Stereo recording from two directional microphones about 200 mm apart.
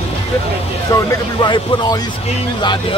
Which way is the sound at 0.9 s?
15° left (ahead or behind).